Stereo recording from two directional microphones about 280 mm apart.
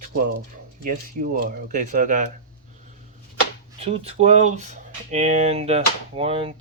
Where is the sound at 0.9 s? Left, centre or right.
Right.